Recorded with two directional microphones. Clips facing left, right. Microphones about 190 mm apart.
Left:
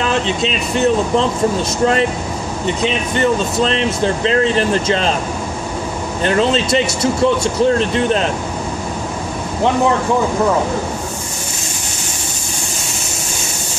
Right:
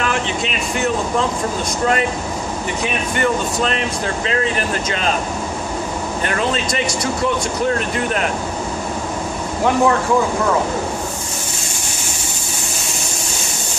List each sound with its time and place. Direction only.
0.0 s a sound: 25° left (ahead or behind)
2.6 s speech: 25° left (ahead or behind)
6.2 s speech: 25° left (ahead or behind)